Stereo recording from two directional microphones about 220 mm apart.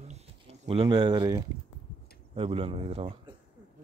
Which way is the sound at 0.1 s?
25° right (ahead or behind).